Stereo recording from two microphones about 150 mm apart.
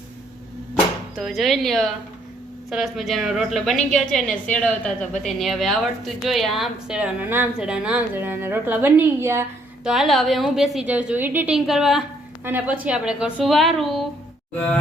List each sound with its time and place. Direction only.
1.1 s a woman's voice: centre (ahead or behind); by 9.5 s 15° right (ahead or behind)
9.8 s a woman's voice: centre (ahead or behind)